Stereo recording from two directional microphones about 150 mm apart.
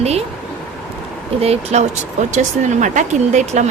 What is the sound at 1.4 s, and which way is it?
Speech, 45° right (ahead or behind).